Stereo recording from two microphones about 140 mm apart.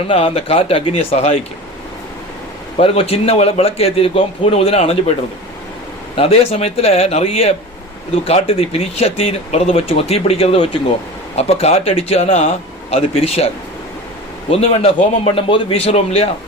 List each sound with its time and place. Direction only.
0.1 s speech: 45° left (ahead or behind)
2.7 s speech: 45° left (ahead or behind)
6.1 s speech: 45° left (ahead or behind)
14.5 s speech: 45° left (ahead or behind)